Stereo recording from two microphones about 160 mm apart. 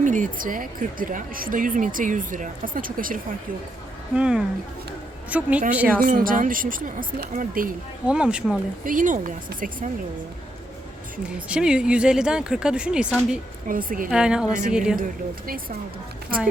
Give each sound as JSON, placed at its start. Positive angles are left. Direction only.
{"t": 0.0, "sound": "a woman's voice", "side_deg": -55}
{"t": 4.1, "sound": "speech", "side_deg": -5}
{"t": 6.0, "sound": "a woman's voice", "side_deg": -60}
{"t": 8.0, "sound": "speech", "side_deg": -5}
{"t": 8.8, "sound": "a woman's voice", "side_deg": -55}
{"t": 11.2, "sound": "speech", "side_deg": -5}
{"t": 13.7, "sound": "a woman's voice", "side_deg": -60}
{"t": 14.1, "sound": "speech", "side_deg": -5}
{"t": 14.9, "sound": "a woman's voice", "side_deg": -65}